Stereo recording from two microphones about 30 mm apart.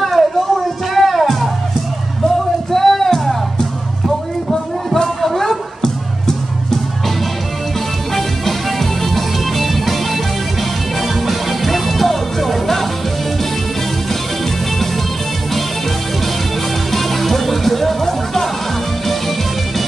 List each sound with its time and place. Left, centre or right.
0.2 s a sound: centre
0.9 s music: centre
2.2 s music: centre
5.0 s a sound: centre
5.8 s music: centre
8.1 s music: centre
11.2 s music: centre
16.9 s music: centre